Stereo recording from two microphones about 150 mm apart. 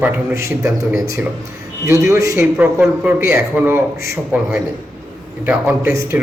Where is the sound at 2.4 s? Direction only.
10° right (ahead or behind).